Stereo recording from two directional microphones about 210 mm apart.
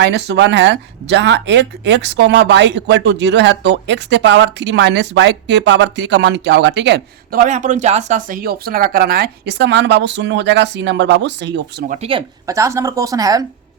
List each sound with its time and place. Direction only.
0.0 s speech: 55° right (ahead or behind)
11.9 s speech: 25° right (ahead or behind)
12.5 s a woman's voice: 15° right (ahead or behind)